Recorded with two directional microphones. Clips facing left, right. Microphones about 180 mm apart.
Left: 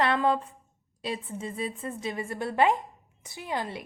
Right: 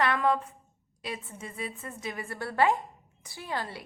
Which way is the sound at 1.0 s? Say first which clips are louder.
Left 5 dB; 30° left (ahead or behind).